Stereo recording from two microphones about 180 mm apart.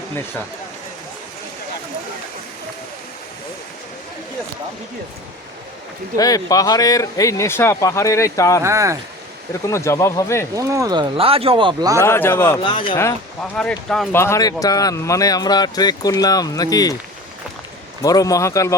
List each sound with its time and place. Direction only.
6.1 s speech: 20° left (ahead or behind)
8.6 s speech: 15° right (ahead or behind)
9.5 s speech: 15° left (ahead or behind)
10.5 s speech: 20° right (ahead or behind)
12.0 s speech: 15° left (ahead or behind)
12.6 s a man's voice: 25° left (ahead or behind)
13.6 s speech: 5° left (ahead or behind)
14.1 s a man's voice: 15° left (ahead or behind)
18.0 s speech: 20° left (ahead or behind)